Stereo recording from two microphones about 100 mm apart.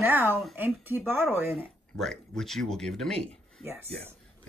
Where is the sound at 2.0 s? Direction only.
5° left (ahead or behind).